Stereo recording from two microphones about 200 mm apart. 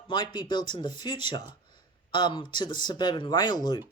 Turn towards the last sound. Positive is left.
turn(degrees=20)  # may be behind; listen again after turning